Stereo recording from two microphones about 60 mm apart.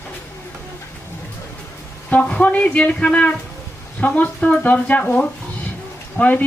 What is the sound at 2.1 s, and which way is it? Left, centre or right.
Speech, centre.